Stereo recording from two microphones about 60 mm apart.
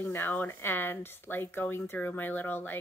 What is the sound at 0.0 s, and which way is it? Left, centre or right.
Speech, left.